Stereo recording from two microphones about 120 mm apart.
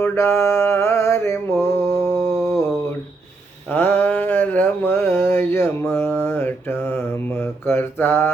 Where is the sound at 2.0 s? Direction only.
50° right (ahead or behind).